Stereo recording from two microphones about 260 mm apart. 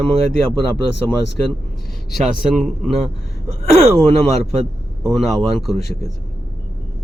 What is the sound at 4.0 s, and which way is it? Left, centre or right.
Speech, centre.